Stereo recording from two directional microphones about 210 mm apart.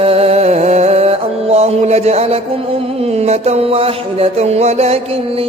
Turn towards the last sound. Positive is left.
turn(degrees=-30)  # may be behind; listen again after turning